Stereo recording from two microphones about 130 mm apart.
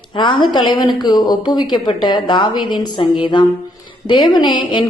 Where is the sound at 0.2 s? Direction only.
35° left (ahead or behind).